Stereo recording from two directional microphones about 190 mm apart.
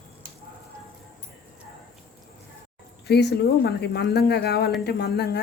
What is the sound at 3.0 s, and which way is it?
Speech, 60° left (ahead or behind).